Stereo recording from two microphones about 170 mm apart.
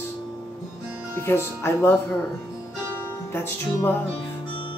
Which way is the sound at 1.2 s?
15° left (ahead or behind).